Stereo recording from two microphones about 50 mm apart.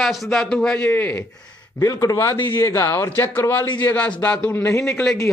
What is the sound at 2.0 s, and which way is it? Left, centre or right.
Speech, left.